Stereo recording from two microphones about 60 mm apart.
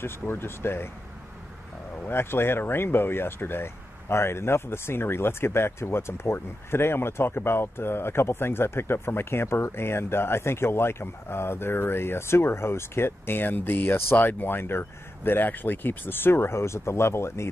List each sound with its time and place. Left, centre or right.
0.0 s speech: left
2.0 s speech: left